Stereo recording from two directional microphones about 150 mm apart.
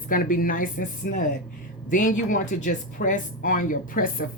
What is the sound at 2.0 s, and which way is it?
A woman's voice, 60° left (ahead or behind).